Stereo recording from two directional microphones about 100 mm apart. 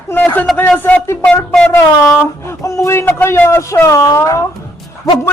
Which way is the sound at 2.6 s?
25° left (ahead or behind).